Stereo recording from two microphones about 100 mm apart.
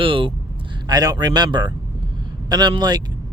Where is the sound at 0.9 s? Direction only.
40° right (ahead or behind).